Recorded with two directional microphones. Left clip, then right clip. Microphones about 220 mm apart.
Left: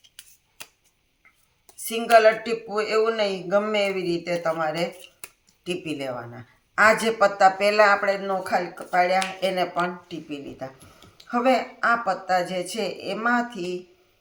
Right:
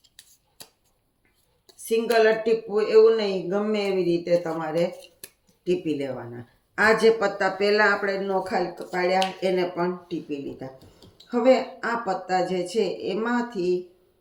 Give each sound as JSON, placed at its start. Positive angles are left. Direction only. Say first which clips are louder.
{"t": 1.8, "sound": "speech", "louder": "left 3 dB", "side_deg": 45}
{"t": 5.6, "sound": "speech", "louder": "right 3 dB", "side_deg": 40}